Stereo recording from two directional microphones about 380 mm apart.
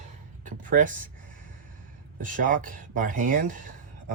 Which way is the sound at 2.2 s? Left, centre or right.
Right.